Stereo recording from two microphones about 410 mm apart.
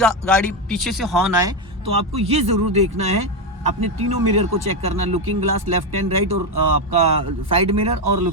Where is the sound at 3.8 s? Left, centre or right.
Right.